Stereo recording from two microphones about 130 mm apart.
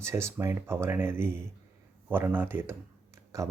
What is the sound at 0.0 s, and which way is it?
Speech, 20° right (ahead or behind).